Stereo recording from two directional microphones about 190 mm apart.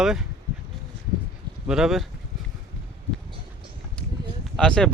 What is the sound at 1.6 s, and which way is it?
Speech, 5° right (ahead or behind).